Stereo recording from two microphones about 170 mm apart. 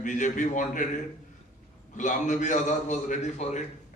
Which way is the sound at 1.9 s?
45° left (ahead or behind).